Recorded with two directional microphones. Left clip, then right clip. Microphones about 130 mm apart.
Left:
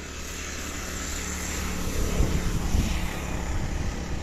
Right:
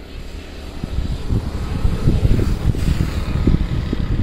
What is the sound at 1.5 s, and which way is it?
Vehicle, 40° left (ahead or behind).